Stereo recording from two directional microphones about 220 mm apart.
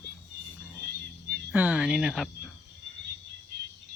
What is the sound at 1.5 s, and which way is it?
Speech, 5° right (ahead or behind).